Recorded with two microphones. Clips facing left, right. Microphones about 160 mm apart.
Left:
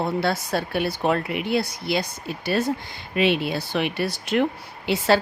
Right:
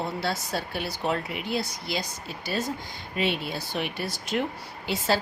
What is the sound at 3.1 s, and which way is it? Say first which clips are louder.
Speech: left 7 dB; 80° left.